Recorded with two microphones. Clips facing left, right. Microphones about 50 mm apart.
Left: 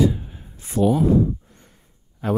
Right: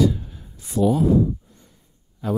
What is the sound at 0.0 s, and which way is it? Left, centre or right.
Speech, left.